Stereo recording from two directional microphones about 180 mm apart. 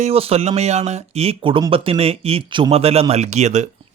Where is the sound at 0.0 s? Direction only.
35° right (ahead or behind).